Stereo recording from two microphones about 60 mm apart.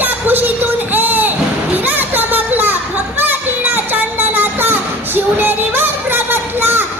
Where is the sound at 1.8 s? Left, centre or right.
Right.